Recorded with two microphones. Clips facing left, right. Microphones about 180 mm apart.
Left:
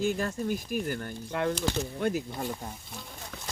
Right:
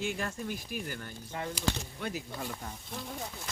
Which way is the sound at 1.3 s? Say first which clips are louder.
Left 9 dB; 80° left.